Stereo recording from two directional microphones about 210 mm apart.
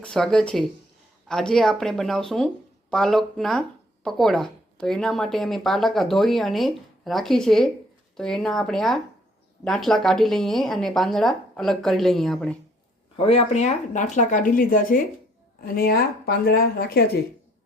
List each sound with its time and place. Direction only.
0.0 s speech: 5° left (ahead or behind)
13.1 s speech: 25° left (ahead or behind); by 17.2 s 50° left (ahead or behind)